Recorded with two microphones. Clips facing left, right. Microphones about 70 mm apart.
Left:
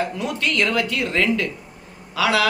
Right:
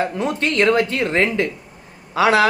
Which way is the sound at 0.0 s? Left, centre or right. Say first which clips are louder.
Right 3 dB; right.